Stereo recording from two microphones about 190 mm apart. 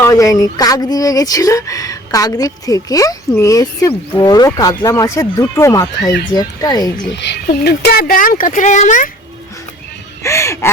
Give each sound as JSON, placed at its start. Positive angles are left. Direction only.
{"t": 0.0, "sound": "speech", "side_deg": 15}
{"t": 7.2, "sound": "speech", "side_deg": 60}
{"t": 10.2, "sound": "speech", "side_deg": 15}